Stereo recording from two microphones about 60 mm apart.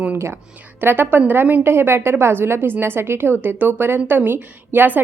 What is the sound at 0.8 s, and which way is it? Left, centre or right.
A woman's voice, right.